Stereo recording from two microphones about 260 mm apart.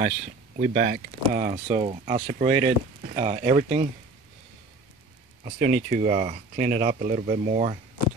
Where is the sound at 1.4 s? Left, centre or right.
Right.